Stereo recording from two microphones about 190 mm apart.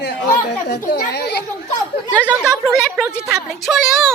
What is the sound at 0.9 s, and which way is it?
Speech, 60° left (ahead or behind).